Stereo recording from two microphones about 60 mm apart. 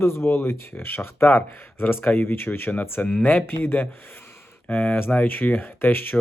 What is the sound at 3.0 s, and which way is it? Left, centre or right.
Speech, left.